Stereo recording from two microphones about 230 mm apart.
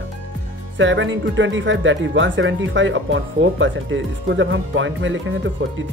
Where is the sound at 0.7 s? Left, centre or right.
Right.